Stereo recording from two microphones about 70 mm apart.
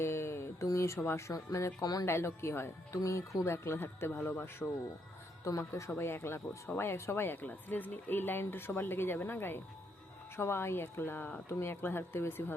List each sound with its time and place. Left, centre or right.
0.0 s mantra: left
1.0 s speech: left
1.8 s speech: left
2.0 s speech: left
5.5 s speech: left
6.0 s speech: left
11.4 s speech: left